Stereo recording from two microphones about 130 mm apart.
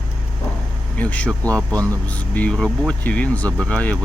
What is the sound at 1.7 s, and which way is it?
Speech, 25° right (ahead or behind).